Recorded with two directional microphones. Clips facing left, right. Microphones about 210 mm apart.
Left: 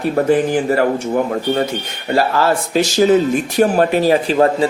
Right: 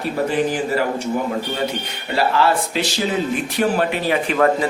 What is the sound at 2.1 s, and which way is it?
Speech, 45° left (ahead or behind).